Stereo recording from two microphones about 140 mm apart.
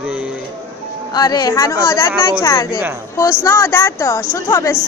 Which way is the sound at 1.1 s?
30° left (ahead or behind).